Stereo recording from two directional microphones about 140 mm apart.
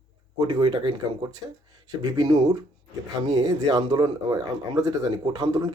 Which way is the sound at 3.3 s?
25° right (ahead or behind).